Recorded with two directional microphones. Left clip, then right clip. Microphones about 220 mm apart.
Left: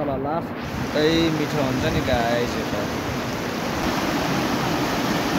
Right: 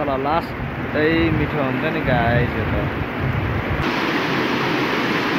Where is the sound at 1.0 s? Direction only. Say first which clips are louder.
Right 2 dB; 15° left (ahead or behind).